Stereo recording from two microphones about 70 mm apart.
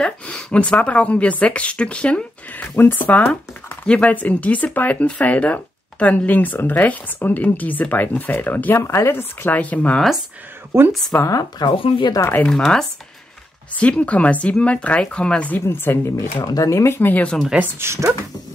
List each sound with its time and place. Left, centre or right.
0.0 s speech: centre
2.7 s speech: left
8.8 s speech: left
10.7 s a woman's voice: right
11.2 s speech: left
12.2 s speech: left
12.4 s speech: centre
15.6 s speech: left
16.3 s speech: left
16.7 s speech: left
17.0 s speech: left
17.7 s speech: right